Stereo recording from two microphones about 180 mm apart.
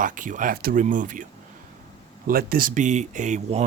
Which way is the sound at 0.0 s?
45° right (ahead or behind).